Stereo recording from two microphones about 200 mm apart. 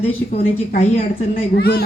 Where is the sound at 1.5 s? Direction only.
50° left (ahead or behind).